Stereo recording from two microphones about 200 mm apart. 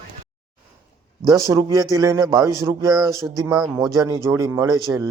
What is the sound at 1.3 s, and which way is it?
Speech, 15° right (ahead or behind).